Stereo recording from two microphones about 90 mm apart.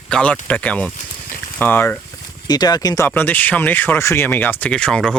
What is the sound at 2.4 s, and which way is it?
Speech, 50° left (ahead or behind).